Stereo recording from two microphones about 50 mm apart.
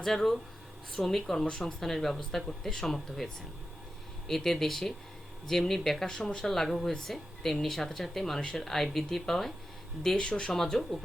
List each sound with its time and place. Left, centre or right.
0.0 s speech: centre
4.3 s speech: centre
10.2 s speech: centre
10.5 s speech: centre